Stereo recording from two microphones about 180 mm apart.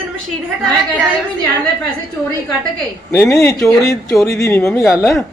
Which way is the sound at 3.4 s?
10° left (ahead or behind).